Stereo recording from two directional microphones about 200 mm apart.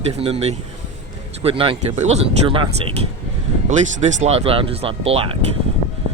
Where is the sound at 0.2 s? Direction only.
30° right (ahead or behind).